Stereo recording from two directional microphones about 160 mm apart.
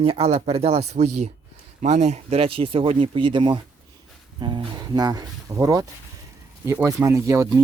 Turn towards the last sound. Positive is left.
turn(degrees=-20)  # may be behind; listen again after turning